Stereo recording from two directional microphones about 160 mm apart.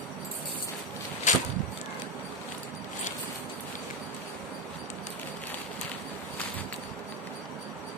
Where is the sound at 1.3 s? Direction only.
50° left (ahead or behind).